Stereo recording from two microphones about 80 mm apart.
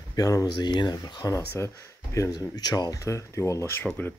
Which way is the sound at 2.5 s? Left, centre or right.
Left.